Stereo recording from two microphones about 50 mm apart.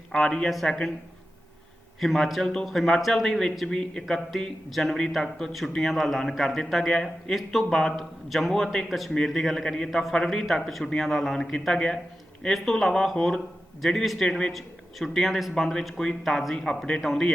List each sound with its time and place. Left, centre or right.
0.1 s a man's voice: centre
2.0 s a man's voice: centre
14.3 s a man's voice: centre
14.5 s a man's voice: centre
16.6 s a man's voice: centre